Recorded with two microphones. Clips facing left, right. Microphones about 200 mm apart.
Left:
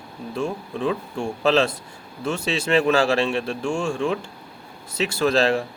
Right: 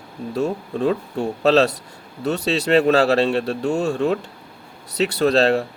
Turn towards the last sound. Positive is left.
turn(degrees=-35)  # may be behind; listen again after turning